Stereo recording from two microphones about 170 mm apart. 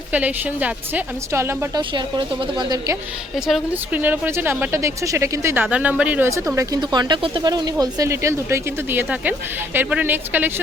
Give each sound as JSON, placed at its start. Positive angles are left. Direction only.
{"t": 0.1, "sound": "speech", "side_deg": -10}
{"t": 3.4, "sound": "speech", "side_deg": -5}